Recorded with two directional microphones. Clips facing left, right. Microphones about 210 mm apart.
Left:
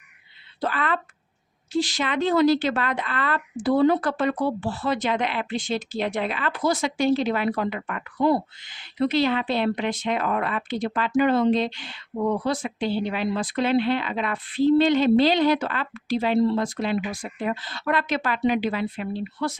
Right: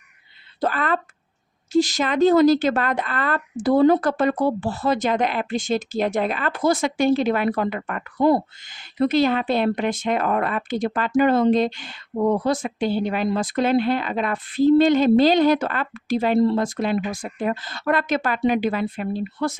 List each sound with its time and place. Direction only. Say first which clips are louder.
0.6 s a woman's voice: right 3 dB; 45° right (ahead or behind)